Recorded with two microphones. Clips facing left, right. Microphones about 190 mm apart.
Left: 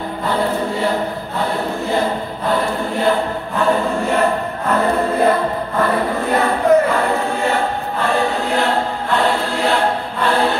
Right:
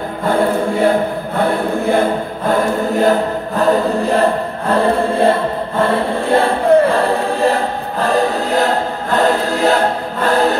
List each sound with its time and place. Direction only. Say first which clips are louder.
0.3 s choir: right 5 dB; 55° right (ahead or behind)
3.0 s choir: right 2 dB; 40° right (ahead or behind)
10.2 s music: right 3 dB; 40° right (ahead or behind)